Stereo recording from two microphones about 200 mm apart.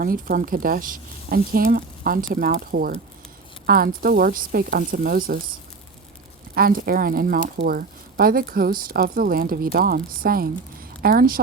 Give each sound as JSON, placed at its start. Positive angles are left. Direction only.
{"t": 0.0, "sound": "speech", "side_deg": -45}
{"t": 6.5, "sound": "speech", "side_deg": -45}